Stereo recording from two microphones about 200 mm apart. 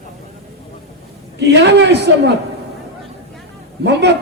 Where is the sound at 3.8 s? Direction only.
60° right (ahead or behind).